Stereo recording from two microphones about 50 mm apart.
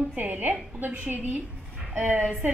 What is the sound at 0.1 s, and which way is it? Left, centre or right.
A woman's voice, right.